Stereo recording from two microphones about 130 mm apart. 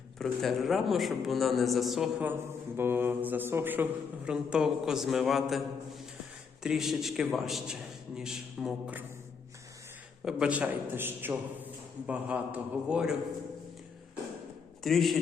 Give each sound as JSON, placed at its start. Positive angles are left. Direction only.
{"t": 0.2, "sound": "a man's voice", "side_deg": 0}
{"t": 2.7, "sound": "a man's voice", "side_deg": -15}
{"t": 10.2, "sound": "a man's voice", "side_deg": -10}
{"t": 14.8, "sound": "a man's voice", "side_deg": 0}